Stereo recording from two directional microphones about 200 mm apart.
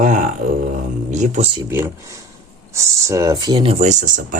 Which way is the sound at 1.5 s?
15° right (ahead or behind).